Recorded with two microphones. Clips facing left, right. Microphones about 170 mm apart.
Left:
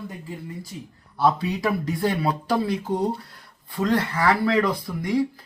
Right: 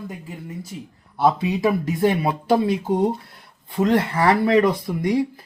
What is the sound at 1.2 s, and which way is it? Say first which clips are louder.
Speech: right 3 dB; 20° right (ahead or behind).